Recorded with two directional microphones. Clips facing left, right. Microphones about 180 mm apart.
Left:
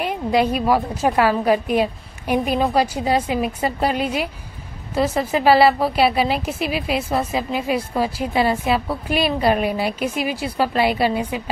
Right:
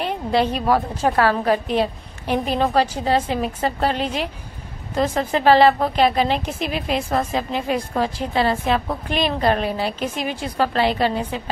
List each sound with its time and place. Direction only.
0.0 s a woman's voice: 10° left (ahead or behind)